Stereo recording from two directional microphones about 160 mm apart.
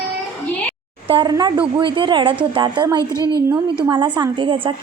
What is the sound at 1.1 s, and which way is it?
A woman's voice, 30° right (ahead or behind).